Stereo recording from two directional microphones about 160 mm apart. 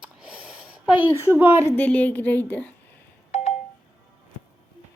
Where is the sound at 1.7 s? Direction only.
10° left (ahead or behind).